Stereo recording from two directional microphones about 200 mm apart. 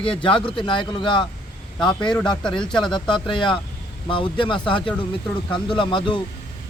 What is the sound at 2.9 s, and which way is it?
Speech, 25° left (ahead or behind).